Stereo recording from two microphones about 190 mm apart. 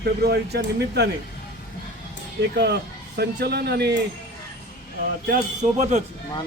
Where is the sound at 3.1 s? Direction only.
60° right (ahead or behind).